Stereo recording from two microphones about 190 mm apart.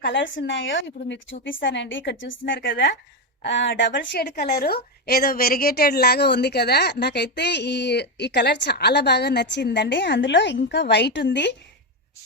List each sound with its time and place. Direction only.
0.0 s a woman's voice: 70° left (ahead or behind)